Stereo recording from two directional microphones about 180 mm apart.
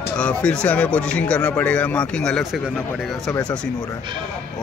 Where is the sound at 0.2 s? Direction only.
5° left (ahead or behind).